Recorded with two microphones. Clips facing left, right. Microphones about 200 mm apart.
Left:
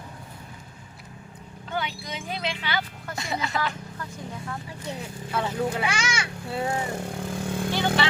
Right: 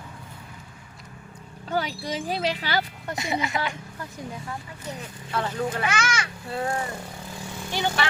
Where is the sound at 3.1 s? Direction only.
20° right (ahead or behind).